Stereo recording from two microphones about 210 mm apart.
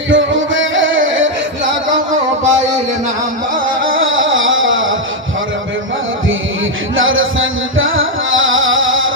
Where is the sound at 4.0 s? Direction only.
70° right (ahead or behind).